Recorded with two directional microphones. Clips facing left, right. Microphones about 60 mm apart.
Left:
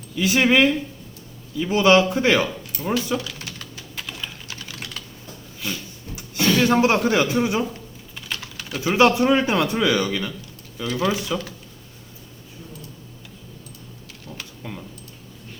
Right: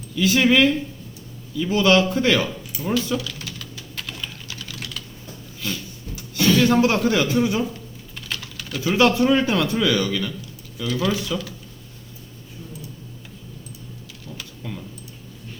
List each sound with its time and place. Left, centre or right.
0.2 s a man's voice: left
2.9 s typing: left
3.9 s typing: centre
4.4 s typing: left
5.5 s a sound: left
8.3 s a man's voice: left
14.6 s typing: left